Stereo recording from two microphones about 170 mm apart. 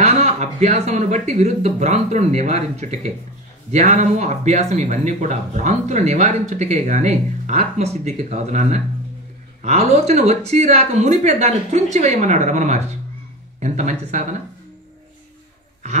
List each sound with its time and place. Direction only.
0.0 s speech: 45° right (ahead or behind)